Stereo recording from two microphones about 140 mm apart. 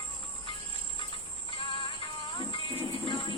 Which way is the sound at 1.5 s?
40° left (ahead or behind).